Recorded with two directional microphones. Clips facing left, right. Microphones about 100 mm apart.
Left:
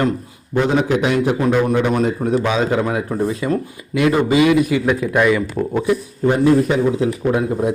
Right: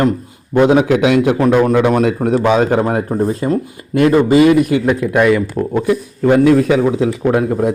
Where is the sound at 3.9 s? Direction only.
45° right (ahead or behind).